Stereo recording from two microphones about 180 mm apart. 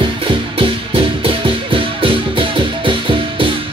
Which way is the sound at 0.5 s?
30° right (ahead or behind).